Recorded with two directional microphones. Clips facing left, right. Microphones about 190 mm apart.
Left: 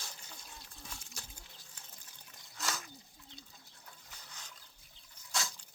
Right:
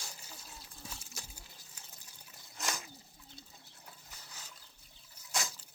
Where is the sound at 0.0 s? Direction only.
10° right (ahead or behind).